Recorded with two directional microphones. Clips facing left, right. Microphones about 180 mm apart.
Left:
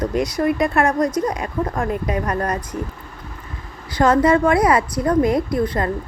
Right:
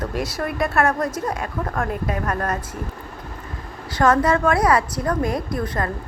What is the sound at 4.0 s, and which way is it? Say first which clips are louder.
A woman's voice: left 3 dB; 20° left (ahead or behind).